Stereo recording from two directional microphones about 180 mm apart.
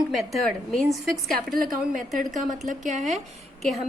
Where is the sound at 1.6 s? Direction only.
50° right (ahead or behind).